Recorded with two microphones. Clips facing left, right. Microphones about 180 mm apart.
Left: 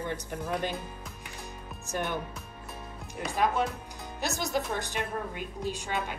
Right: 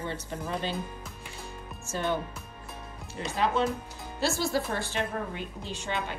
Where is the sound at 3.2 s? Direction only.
10° left (ahead or behind).